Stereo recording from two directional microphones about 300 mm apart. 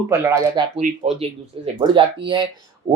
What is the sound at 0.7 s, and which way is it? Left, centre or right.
Speech, right.